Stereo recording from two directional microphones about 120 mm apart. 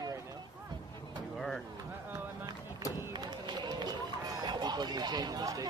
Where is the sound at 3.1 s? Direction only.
35° right (ahead or behind).